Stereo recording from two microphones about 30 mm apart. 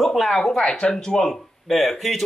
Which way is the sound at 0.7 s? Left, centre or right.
Left.